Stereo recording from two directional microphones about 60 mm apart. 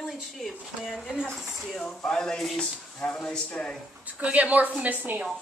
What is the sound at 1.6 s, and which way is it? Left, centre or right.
Speech, centre.